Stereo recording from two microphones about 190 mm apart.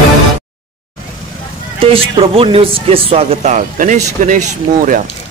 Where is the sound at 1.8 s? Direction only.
30° right (ahead or behind).